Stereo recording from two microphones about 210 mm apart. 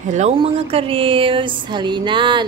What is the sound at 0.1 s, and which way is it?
Speech, 30° right (ahead or behind).